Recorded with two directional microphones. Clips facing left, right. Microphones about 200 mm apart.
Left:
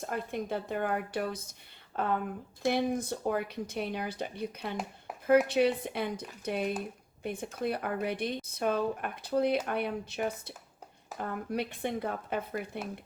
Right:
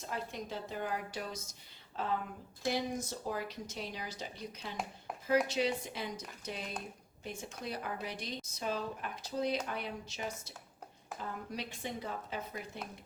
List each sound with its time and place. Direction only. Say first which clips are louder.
0.0 s speech: left 6 dB; 55° left (ahead or behind)